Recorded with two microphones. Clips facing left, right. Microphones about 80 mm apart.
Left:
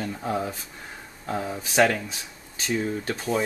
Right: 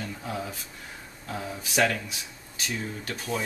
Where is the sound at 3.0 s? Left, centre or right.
Left.